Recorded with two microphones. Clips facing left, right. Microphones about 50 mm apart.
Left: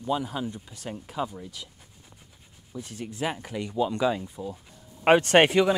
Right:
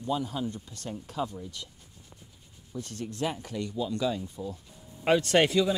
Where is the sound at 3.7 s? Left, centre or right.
Left.